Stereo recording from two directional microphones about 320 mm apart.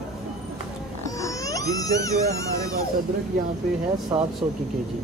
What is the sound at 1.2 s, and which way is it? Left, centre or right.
Roaring cats, centre.